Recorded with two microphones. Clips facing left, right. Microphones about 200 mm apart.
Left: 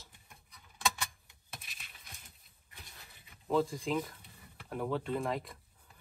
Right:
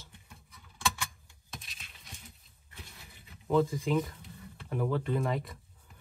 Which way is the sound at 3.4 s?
Centre (ahead or behind).